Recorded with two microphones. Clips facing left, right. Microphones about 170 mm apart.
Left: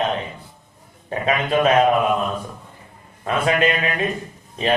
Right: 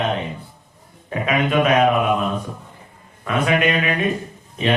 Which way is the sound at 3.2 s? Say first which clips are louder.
Even; 35° left (ahead or behind).